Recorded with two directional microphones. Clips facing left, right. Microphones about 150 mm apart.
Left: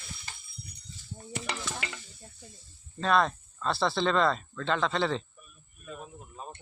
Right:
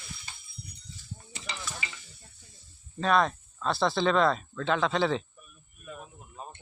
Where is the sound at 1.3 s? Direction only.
60° left (ahead or behind).